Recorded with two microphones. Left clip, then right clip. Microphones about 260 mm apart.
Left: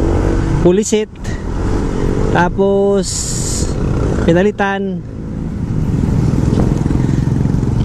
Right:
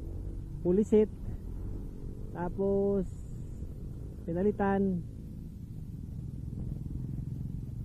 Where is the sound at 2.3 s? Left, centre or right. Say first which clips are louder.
Left 18 dB; centre.